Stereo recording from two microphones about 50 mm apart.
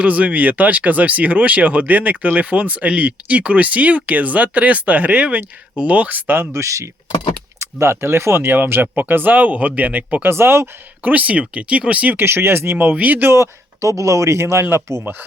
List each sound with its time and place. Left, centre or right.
0.0 s speech: right
6.2 s speech: right
6.6 s speech: right
7.6 s speech: right
10.2 s speech: right
11.0 s speech: right
12.1 s speech: right
13.3 s speech: right
14.8 s speech: centre